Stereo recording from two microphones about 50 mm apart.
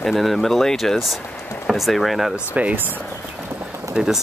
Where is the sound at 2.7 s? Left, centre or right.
Right.